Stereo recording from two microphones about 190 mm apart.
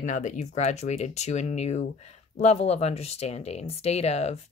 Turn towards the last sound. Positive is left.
turn(degrees=35)  # may be behind; listen again after turning